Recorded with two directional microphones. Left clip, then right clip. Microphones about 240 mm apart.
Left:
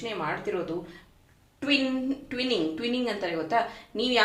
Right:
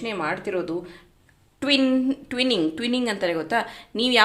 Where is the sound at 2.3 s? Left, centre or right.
Right.